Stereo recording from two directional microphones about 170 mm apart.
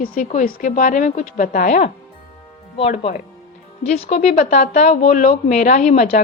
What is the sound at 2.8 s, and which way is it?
A woman's voice, 40° left (ahead or behind).